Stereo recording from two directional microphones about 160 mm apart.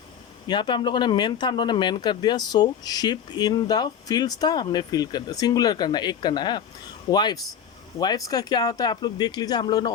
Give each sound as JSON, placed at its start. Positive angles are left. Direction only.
{"t": 0.4, "sound": "speech", "side_deg": 25}